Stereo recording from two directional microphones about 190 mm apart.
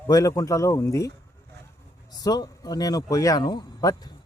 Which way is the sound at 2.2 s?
20° left (ahead or behind).